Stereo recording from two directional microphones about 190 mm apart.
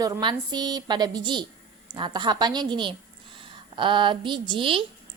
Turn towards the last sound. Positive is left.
turn(degrees=-25)  # may be behind; listen again after turning